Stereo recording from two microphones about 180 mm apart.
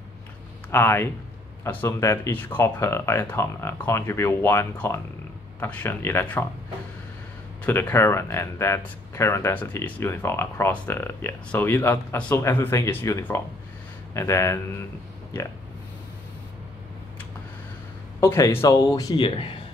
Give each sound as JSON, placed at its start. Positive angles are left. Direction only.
{"t": 0.7, "sound": "speech", "side_deg": 15}
{"t": 7.6, "sound": "speech", "side_deg": 15}
{"t": 18.2, "sound": "speech", "side_deg": 15}